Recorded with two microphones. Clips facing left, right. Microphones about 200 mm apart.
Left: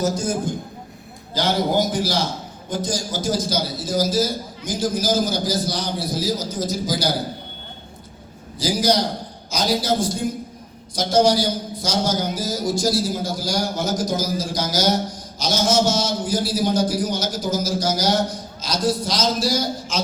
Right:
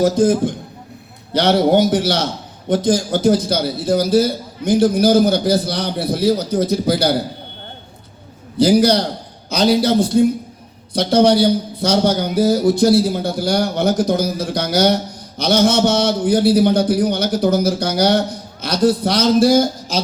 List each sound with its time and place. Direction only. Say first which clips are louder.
0.0 s a man's voice: right 8 dB; 60° right (ahead or behind)
1.3 s a man's voice: right 7 dB; 70° right (ahead or behind)
8.5 s a man's voice: right 7 dB; 60° right (ahead or behind)
19.9 s speech: right 2 dB; 35° right (ahead or behind)